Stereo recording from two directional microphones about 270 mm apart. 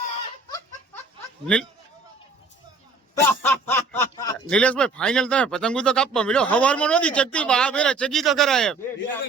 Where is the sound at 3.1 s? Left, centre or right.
Centre.